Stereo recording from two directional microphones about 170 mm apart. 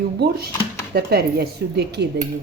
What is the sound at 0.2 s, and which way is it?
A woman's voice, 70° right (ahead or behind).